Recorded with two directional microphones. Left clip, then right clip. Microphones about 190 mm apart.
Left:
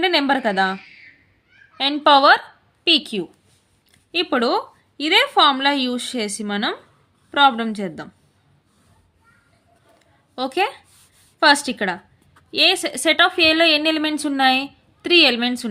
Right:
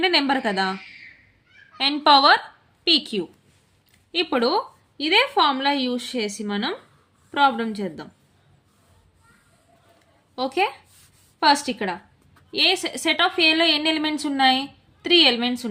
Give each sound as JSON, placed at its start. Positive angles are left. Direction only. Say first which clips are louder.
{"t": 0.0, "sound": "a woman's voice", "louder": "left 2 dB", "side_deg": 25}
{"t": 1.8, "sound": "a woman's voice", "louder": "left 2 dB", "side_deg": 20}
{"t": 10.3, "sound": "a woman's voice", "louder": "left 2 dB", "side_deg": 35}